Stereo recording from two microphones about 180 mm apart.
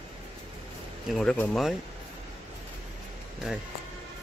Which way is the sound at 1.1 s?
5° left (ahead or behind).